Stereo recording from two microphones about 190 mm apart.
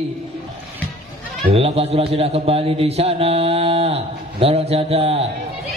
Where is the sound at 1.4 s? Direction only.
30° right (ahead or behind).